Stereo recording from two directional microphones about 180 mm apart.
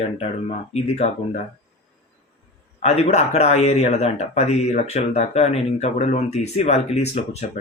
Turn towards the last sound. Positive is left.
turn(degrees=35)  # may be behind; listen again after turning